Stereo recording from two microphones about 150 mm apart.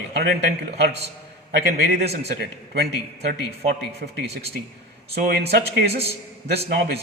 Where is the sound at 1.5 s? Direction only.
90° right.